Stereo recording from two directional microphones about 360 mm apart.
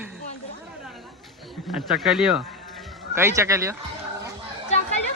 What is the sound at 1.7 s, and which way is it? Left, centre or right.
Speech, centre.